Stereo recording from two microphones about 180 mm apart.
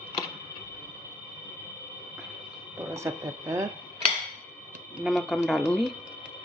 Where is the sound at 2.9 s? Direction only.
15° right (ahead or behind).